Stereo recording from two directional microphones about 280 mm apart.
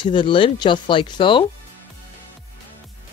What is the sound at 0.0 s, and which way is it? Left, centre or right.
Speech, centre.